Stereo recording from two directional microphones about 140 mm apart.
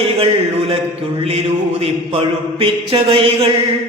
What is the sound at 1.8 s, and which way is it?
A capella, 45° right (ahead or behind).